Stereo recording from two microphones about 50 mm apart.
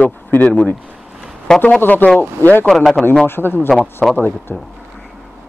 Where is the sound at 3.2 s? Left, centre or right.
Left.